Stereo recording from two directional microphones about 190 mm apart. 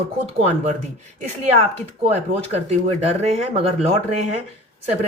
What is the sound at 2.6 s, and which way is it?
Speech, 35° right (ahead or behind).